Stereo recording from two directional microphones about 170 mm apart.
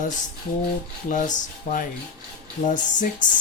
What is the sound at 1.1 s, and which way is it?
Speech, 50° left (ahead or behind).